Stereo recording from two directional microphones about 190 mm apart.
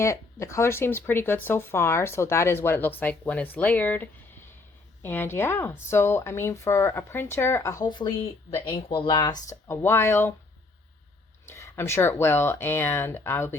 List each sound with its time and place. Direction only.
0.0 s speech: 15° left (ahead or behind)
11.4 s speech: 15° left (ahead or behind)